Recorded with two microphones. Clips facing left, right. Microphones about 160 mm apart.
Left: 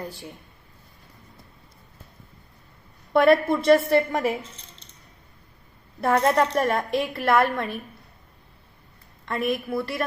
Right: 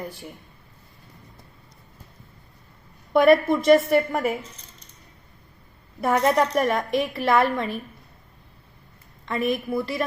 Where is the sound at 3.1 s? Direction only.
15° right (ahead or behind).